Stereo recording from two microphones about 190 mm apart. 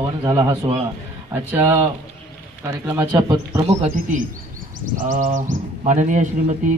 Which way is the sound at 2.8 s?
10° right (ahead or behind).